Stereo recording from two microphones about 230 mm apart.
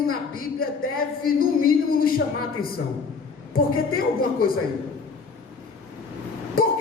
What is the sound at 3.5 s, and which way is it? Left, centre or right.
Speech, left.